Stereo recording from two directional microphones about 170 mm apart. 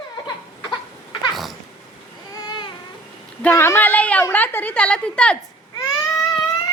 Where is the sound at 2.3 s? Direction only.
25° left (ahead or behind).